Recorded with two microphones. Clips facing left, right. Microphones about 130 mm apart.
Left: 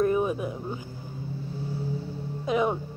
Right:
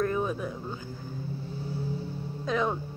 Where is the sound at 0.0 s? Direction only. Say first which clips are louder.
Left 4 dB; 15° left (ahead or behind).